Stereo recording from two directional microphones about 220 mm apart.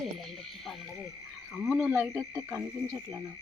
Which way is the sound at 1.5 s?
Centre (ahead or behind).